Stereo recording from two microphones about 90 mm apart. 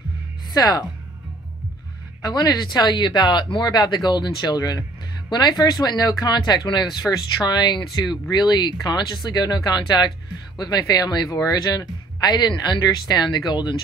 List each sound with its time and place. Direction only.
0.5 s speech: 45° left (ahead or behind)
2.2 s speech: 45° left (ahead or behind)